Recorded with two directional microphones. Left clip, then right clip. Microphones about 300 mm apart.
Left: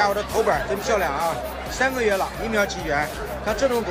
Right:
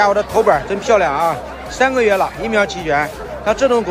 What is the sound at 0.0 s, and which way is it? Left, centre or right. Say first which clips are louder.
Speech: right 8 dB; centre.